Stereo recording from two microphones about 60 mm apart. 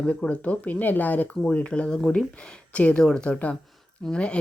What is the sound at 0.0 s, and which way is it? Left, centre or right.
Speech, centre.